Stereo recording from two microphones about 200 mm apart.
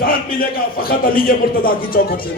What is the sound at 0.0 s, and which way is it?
Speech, 45° left (ahead or behind).